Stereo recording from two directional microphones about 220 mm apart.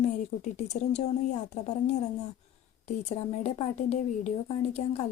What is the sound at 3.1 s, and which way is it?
Speech, 30° left (ahead or behind).